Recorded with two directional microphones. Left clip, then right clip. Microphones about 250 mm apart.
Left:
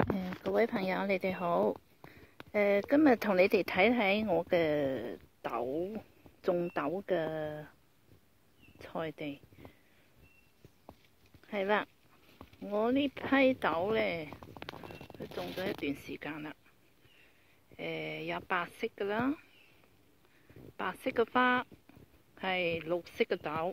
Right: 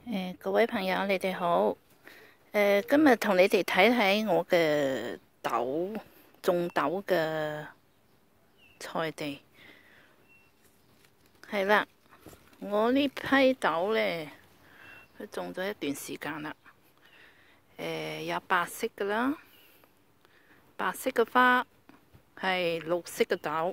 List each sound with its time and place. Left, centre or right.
0.6 s speech: centre
8.7 s speech: right
11.4 s speech: right
15.3 s speech: right
17.7 s speech: right
20.7 s speech: right